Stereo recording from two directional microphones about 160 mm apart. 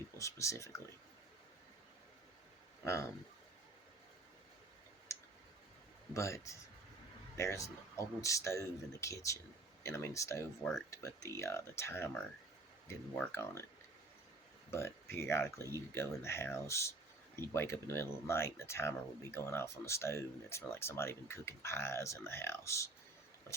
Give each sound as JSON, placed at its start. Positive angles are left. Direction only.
{"t": 0.2, "sound": "speech", "side_deg": 20}
{"t": 2.8, "sound": "speech", "side_deg": 20}
{"t": 5.1, "sound": "clicking", "side_deg": 20}
{"t": 6.1, "sound": "speech", "side_deg": 20}
{"t": 13.3, "sound": "speech", "side_deg": 15}
{"t": 14.7, "sound": "speech", "side_deg": 15}